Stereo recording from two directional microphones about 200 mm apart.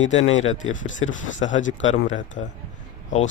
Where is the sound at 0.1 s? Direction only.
35° left (ahead or behind).